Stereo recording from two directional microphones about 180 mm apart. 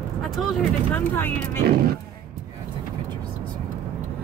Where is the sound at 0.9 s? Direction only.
10° left (ahead or behind).